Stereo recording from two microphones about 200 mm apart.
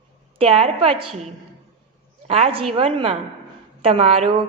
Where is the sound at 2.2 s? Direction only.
30° right (ahead or behind).